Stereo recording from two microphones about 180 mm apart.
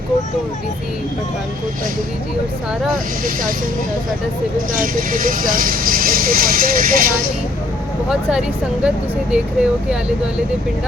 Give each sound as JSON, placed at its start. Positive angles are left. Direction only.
{"t": 4.7, "sound": "speech", "side_deg": -50}
{"t": 8.1, "sound": "speech", "side_deg": -5}